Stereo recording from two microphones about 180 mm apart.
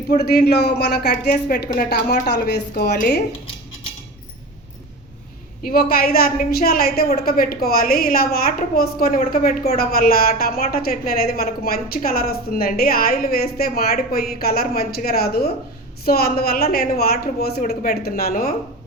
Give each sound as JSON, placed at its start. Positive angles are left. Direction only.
{"t": 0.2, "sound": "a woman's voice", "side_deg": 60}
{"t": 2.2, "sound": "a woman's voice", "side_deg": 70}
{"t": 5.6, "sound": "a woman's voice", "side_deg": 55}